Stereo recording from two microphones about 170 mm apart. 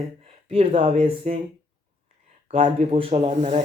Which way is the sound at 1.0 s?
35° right (ahead or behind).